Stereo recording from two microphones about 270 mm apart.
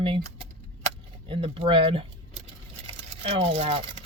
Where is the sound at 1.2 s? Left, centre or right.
Centre.